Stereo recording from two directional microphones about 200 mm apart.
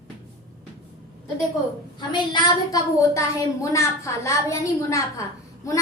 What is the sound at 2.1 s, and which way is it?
A woman's voice, 20° left (ahead or behind).